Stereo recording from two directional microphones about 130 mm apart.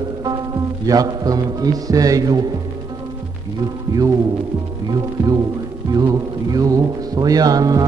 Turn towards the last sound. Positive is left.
turn(degrees=-30)  # may be behind; listen again after turning